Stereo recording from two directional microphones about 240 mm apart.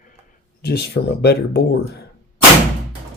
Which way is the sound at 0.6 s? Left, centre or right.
Left.